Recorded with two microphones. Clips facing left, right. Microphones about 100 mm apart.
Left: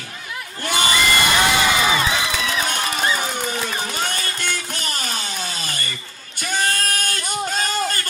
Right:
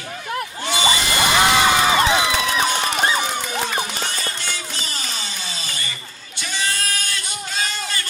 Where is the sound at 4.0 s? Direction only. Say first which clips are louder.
Left 2 dB; 50° left (ahead or behind).